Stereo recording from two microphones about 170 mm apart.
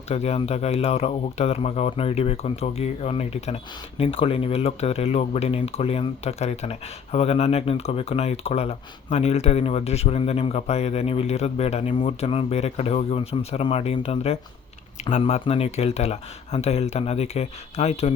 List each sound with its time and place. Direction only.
0.1 s speech: 40° left (ahead or behind)